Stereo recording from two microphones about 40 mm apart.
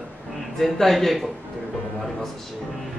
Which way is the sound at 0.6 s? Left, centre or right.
Centre.